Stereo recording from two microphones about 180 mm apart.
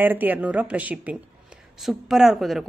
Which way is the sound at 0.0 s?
10° right (ahead or behind).